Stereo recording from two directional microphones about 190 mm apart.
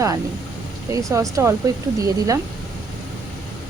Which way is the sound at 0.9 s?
15° right (ahead or behind).